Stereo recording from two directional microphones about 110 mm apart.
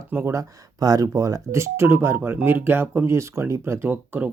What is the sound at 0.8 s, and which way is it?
Speech, 35° right (ahead or behind).